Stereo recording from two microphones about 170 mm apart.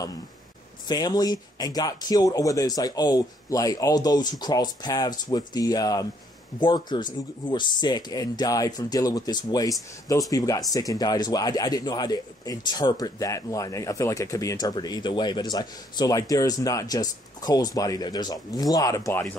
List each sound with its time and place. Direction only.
0.8 s speech: 25° left (ahead or behind)